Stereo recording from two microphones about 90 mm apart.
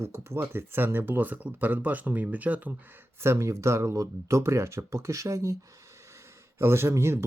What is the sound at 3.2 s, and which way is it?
Speech, 30° right (ahead or behind).